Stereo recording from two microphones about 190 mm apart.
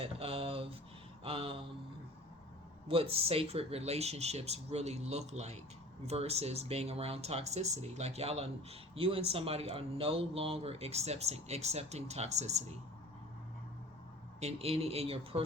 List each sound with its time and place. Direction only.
0.0 s speech: 30° right (ahead or behind)
2.8 s speech: 30° right (ahead or behind)
14.4 s speech: 30° right (ahead or behind)